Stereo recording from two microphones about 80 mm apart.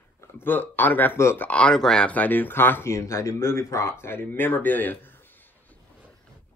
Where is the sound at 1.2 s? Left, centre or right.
Left.